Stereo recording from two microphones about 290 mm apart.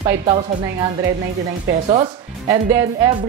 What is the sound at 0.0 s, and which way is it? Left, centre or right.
Speech, centre.